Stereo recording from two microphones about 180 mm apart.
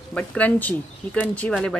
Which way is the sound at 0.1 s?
5° left (ahead or behind).